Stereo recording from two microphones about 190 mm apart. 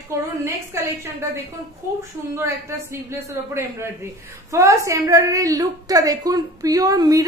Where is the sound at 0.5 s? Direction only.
10° right (ahead or behind).